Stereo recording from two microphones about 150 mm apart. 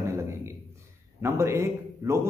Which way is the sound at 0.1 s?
20° right (ahead or behind).